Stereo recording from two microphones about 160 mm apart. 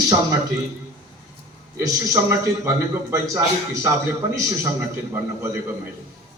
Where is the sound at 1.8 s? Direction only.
20° right (ahead or behind).